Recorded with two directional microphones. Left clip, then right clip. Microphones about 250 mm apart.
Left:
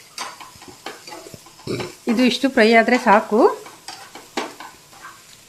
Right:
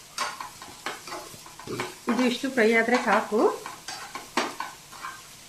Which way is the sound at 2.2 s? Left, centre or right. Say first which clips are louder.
Left 8 dB; left.